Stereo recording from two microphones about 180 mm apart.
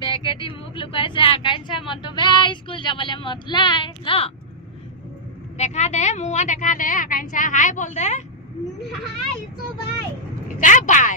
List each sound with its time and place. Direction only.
0.0 s a sound: 25° left (ahead or behind)
0.4 s a woman's voice: 30° left (ahead or behind)
5.6 s a woman's voice: 40° left (ahead or behind)
10.6 s speech: 45° left (ahead or behind)